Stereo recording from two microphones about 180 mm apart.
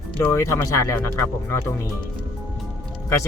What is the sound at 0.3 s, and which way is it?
Speech, 15° left (ahead or behind).